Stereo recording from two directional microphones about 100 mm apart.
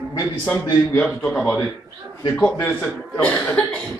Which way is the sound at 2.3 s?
15° left (ahead or behind).